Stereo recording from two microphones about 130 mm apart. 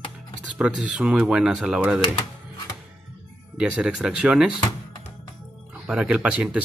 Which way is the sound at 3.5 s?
5° right (ahead or behind).